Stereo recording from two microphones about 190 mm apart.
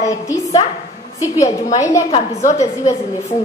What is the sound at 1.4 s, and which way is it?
Speech, 15° left (ahead or behind).